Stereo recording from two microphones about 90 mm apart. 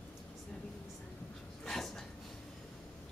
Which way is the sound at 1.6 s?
5° left (ahead or behind).